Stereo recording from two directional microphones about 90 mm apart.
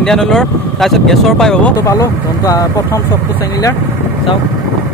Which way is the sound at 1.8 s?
35° left (ahead or behind).